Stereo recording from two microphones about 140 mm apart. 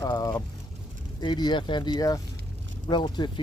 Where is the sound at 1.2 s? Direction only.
30° left (ahead or behind).